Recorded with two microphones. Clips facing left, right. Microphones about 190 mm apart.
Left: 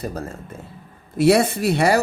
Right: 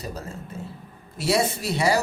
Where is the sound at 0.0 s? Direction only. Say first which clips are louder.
Left 5 dB; 55° left (ahead or behind).